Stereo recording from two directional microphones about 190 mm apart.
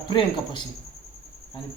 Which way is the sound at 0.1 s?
25° left (ahead or behind).